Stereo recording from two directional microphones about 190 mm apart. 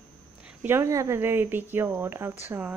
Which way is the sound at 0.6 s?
10° right (ahead or behind).